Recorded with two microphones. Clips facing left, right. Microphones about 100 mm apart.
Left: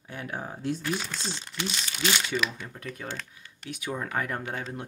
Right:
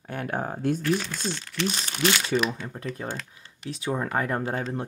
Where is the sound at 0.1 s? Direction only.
50° right (ahead or behind).